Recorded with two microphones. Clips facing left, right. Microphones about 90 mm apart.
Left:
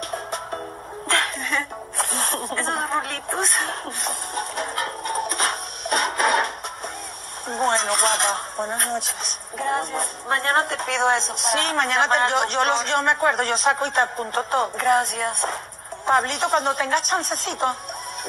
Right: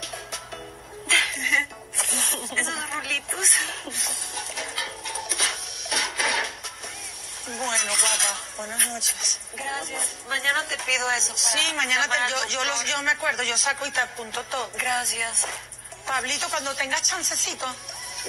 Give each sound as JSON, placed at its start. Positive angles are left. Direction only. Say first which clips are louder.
{"t": 0.1, "sound": "music", "louder": "left 8 dB", "side_deg": 45}
{"t": 7.4, "sound": "speech", "louder": "left 8 dB", "side_deg": 50}